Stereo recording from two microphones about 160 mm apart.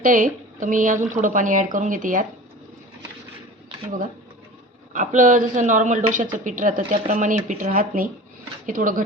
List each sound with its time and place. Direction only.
0.0 s speech: 55° right (ahead or behind)
4.9 s speech: 55° right (ahead or behind)